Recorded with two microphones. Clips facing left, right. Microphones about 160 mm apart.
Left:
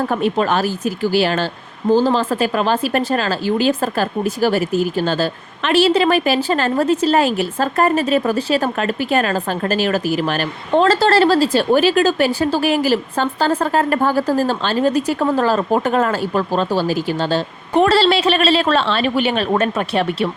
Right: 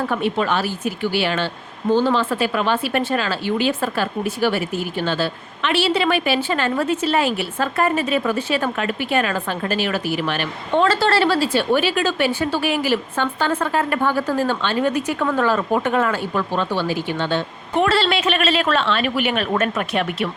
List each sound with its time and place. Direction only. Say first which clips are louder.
0.0 s speech: left 3 dB; 40° left (ahead or behind)